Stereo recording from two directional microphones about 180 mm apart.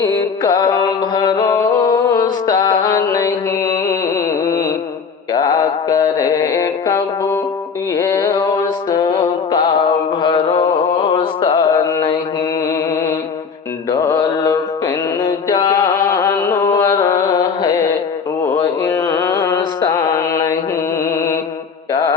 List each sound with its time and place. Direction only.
0.0 s mantra: 20° left (ahead or behind)
4.1 s a sound: 15° left (ahead or behind)
5.3 s mantra: 20° left (ahead or behind)
7.9 s music: 20° left (ahead or behind)
10.2 s mantra: 25° left (ahead or behind)
11.1 s music: 30° left (ahead or behind)
13.9 s mantra: 20° left (ahead or behind)